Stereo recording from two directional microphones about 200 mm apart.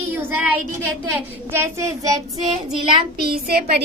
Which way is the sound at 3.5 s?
50° right (ahead or behind).